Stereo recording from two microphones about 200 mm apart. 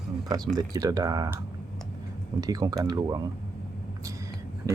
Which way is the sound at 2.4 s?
20° right (ahead or behind).